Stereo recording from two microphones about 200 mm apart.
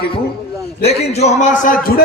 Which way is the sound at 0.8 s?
35° left (ahead or behind).